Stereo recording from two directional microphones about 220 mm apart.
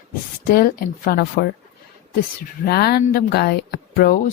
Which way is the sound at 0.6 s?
40° left (ahead or behind).